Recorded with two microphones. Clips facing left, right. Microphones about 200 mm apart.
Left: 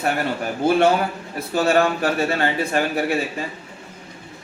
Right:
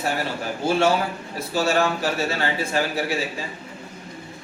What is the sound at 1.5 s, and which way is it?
Speech, 55° left (ahead or behind).